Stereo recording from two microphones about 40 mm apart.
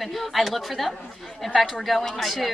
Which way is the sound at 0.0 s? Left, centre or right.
Centre.